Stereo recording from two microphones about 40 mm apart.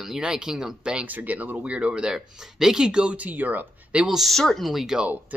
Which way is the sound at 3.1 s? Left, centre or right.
Right.